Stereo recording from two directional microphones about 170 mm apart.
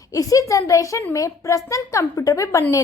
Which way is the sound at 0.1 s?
20° left (ahead or behind).